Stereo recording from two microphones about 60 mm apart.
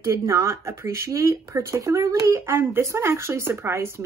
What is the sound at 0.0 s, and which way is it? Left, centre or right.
Speech, right.